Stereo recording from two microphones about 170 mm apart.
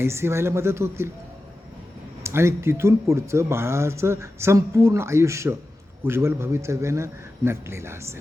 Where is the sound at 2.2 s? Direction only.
15° right (ahead or behind).